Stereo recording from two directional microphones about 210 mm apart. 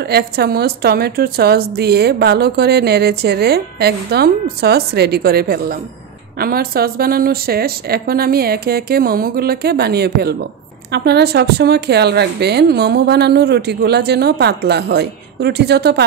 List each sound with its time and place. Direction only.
0.1 s a woman's voice: 50° right (ahead or behind)